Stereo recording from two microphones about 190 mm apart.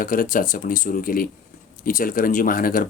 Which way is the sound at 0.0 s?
45° left (ahead or behind).